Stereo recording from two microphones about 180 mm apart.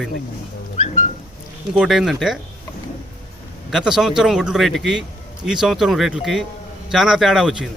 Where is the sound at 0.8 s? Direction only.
45° left (ahead or behind).